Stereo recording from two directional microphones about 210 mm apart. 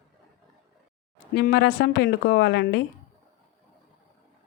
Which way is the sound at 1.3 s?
50° left (ahead or behind).